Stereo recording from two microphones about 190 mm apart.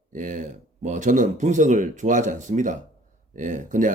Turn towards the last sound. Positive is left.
turn(degrees=-40)  # may be behind; listen again after turning